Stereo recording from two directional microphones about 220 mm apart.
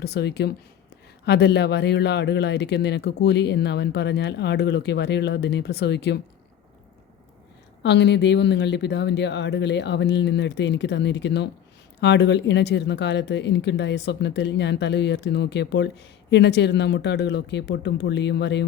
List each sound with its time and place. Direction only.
0.0 s speech: 50° left (ahead or behind)
7.8 s speech: 50° left (ahead or behind)